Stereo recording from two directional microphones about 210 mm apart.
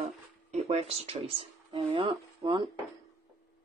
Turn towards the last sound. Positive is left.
turn(degrees=-25)  # may be behind; listen again after turning